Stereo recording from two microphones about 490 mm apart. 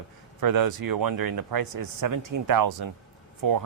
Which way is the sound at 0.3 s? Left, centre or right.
Right.